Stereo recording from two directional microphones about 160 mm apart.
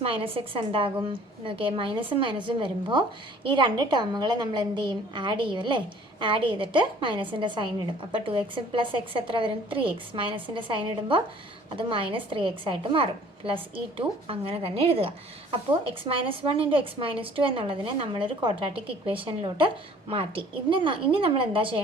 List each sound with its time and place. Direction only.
0.0 s a woman's voice: 35° right (ahead or behind)